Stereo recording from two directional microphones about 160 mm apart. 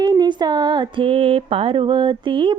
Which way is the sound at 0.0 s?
25° right (ahead or behind).